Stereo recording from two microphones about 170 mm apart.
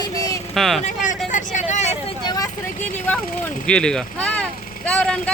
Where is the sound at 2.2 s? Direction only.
20° left (ahead or behind).